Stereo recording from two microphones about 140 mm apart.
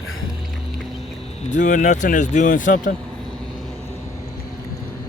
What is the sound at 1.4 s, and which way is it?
Speech, 65° left (ahead or behind).